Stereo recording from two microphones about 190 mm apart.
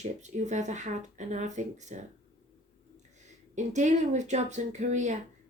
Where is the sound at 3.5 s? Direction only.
40° right (ahead or behind).